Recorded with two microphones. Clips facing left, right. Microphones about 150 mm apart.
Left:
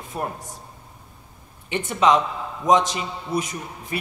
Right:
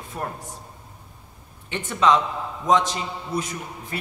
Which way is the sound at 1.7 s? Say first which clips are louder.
Left 1 dB; 15° left (ahead or behind).